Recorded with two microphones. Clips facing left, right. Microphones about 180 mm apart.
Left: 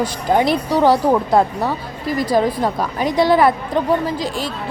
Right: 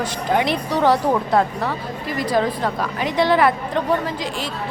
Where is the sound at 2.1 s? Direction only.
35° left (ahead or behind).